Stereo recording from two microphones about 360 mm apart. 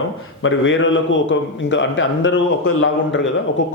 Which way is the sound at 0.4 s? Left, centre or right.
Left.